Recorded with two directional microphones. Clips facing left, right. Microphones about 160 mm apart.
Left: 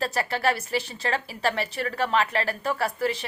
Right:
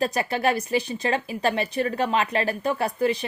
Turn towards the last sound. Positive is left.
turn(degrees=-20)  # may be behind; listen again after turning